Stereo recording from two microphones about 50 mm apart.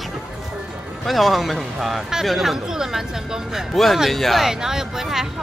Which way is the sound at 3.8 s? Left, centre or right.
Centre.